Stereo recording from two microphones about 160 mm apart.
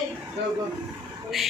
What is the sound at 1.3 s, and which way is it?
Speech, centre (ahead or behind).